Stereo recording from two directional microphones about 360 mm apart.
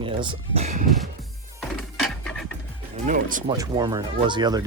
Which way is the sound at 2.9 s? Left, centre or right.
Right.